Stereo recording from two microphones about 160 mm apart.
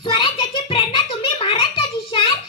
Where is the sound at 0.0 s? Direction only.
30° left (ahead or behind).